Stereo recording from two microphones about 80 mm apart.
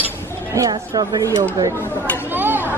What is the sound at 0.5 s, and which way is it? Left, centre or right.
Speech, right.